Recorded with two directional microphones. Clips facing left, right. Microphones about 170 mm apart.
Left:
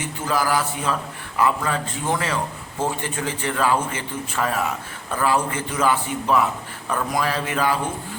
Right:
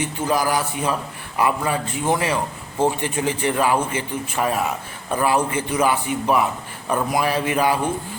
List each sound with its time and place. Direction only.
0.0 s a man's voice: 15° right (ahead or behind)